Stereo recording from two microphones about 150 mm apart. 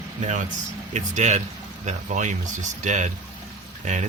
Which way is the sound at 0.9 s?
50° right (ahead or behind).